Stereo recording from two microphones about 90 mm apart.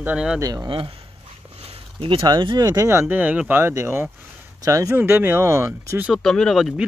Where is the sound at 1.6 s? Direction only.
90° right.